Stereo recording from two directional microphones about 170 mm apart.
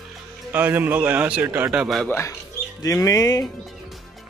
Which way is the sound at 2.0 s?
15° left (ahead or behind).